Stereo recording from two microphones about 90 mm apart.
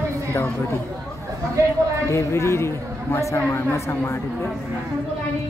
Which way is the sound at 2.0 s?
35° left (ahead or behind).